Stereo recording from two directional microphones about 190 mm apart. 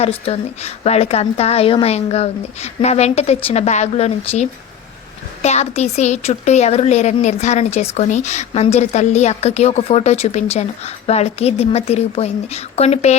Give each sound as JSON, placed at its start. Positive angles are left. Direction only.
{"t": 0.0, "sound": "a woman's voice", "side_deg": 30}